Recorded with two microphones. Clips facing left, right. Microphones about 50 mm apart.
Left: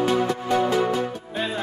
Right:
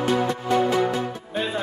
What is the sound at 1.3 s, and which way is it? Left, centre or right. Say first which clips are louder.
Music: right 4 dB; centre.